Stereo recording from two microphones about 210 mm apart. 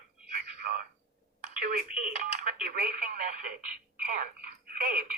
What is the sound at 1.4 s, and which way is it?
Telephone, 40° right (ahead or behind).